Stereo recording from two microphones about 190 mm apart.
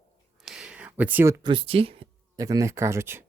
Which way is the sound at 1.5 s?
30° right (ahead or behind).